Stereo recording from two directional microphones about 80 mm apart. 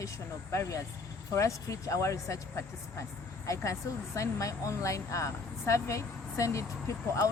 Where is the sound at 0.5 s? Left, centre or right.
Left.